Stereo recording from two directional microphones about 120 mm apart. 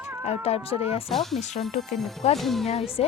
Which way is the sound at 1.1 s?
Centre (ahead or behind).